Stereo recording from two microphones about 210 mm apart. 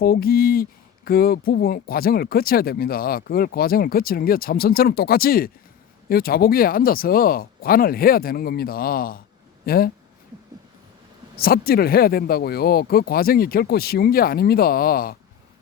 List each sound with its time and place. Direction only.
0.0 s speech: 45° left (ahead or behind)
11.3 s speech: 45° left (ahead or behind)